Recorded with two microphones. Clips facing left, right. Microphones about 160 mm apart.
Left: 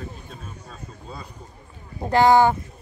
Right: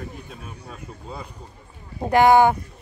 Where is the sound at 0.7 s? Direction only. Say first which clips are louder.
Right 4 dB; 20° right (ahead or behind).